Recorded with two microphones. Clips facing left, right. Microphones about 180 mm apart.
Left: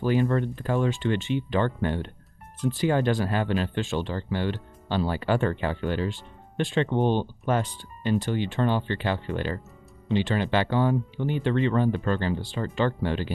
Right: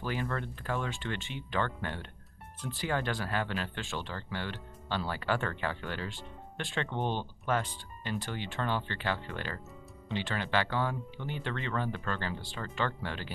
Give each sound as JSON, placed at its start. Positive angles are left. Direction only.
{"t": 0.0, "sound": "speech", "side_deg": 25}